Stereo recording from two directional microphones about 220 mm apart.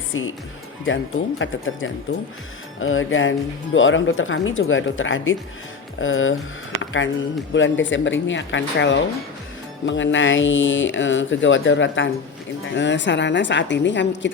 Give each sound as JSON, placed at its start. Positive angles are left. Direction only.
{"t": 0.1, "sound": "speech", "side_deg": 65}
{"t": 7.5, "sound": "speech", "side_deg": 60}